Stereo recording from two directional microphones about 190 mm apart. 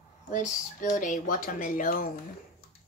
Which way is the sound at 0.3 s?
40° left (ahead or behind).